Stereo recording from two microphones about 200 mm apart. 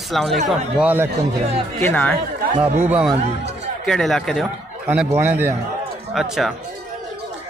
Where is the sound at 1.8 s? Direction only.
10° left (ahead or behind).